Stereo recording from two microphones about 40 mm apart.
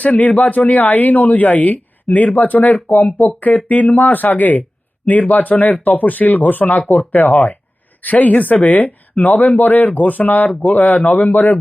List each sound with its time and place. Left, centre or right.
0.0 s speech: left